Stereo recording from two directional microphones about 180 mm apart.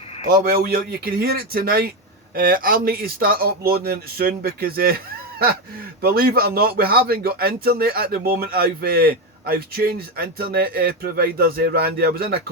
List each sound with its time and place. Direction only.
0.3 s a man's voice: 55° right (ahead or behind)
6.0 s a man's voice: 55° right (ahead or behind)